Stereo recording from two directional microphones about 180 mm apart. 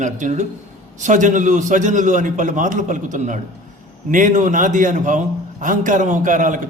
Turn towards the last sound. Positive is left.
turn(degrees=-45)  # may be behind; listen again after turning